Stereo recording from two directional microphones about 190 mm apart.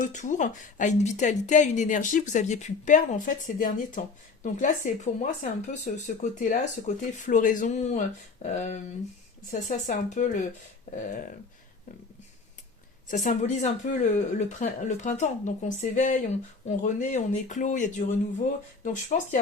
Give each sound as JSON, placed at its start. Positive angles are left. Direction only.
{"t": 0.0, "sound": "speech", "side_deg": 40}
{"t": 13.1, "sound": "speech", "side_deg": 40}